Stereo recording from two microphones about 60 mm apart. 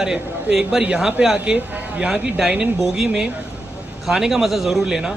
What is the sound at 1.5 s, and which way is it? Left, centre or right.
Speech, right.